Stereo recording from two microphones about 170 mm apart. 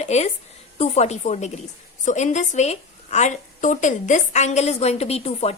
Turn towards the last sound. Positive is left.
turn(degrees=35)  # may be behind; listen again after turning